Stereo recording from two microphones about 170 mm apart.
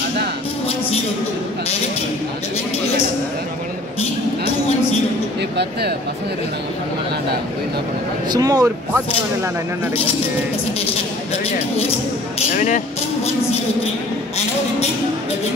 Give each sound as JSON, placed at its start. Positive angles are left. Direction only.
{"t": 5.6, "sound": "speech", "side_deg": -70}
{"t": 8.3, "sound": "speech", "side_deg": -20}
{"t": 12.4, "sound": "speech", "side_deg": 45}